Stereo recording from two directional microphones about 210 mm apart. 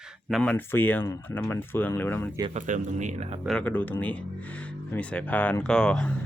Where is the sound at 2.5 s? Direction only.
35° right (ahead or behind).